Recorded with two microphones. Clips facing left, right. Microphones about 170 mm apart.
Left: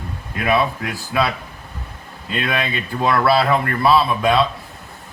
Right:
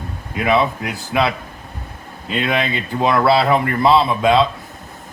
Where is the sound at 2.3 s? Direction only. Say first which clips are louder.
Right 3 dB; 20° right (ahead or behind).